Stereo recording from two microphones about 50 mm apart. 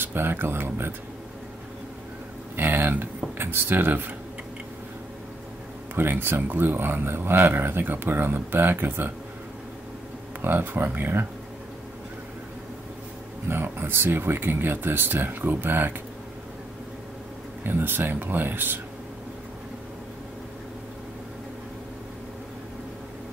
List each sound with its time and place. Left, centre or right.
0.0 s speech: right
2.5 s a sound: right
3.3 s speech: right
5.9 s speech: right
10.4 s speech: right
13.5 s speech: right
17.6 s speech: right